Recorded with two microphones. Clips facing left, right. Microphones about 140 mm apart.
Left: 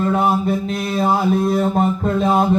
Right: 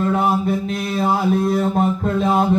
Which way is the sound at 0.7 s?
35° left (ahead or behind).